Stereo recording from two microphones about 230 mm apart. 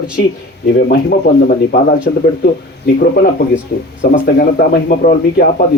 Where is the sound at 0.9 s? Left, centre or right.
Left.